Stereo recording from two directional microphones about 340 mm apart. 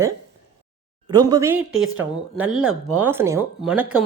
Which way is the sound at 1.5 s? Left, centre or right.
Right.